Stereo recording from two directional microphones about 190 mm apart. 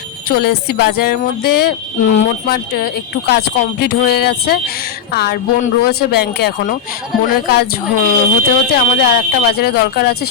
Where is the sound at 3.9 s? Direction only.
60° left (ahead or behind).